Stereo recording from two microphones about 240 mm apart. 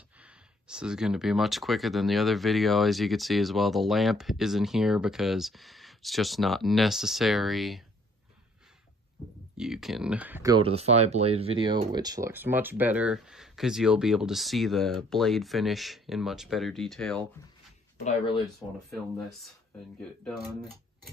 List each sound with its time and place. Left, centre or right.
0.2 s speech: centre
9.6 s speech: centre
17.9 s speech: left
18.6 s speech: centre